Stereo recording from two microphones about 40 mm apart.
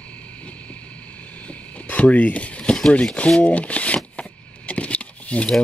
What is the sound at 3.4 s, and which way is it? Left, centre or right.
Speech, left.